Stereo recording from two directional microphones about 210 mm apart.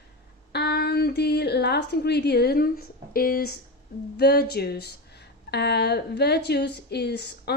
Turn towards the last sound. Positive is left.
turn(degrees=50)  # may be behind; listen again after turning